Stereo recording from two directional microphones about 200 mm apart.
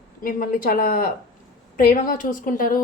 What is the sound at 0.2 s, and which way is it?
A woman's voice, 45° left (ahead or behind).